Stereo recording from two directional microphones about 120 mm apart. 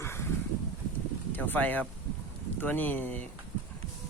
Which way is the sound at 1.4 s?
15° left (ahead or behind).